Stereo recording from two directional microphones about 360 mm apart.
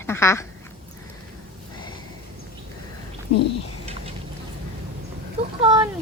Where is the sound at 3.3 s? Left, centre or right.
Left.